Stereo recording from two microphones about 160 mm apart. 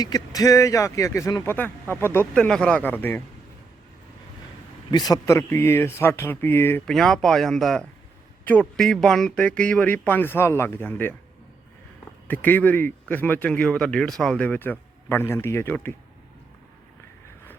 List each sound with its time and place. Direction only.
0.0 s speech: 25° left (ahead or behind)
4.9 s speech: 25° left (ahead or behind)
6.8 s speech: 5° left (ahead or behind)
12.3 s speech: 10° left (ahead or behind)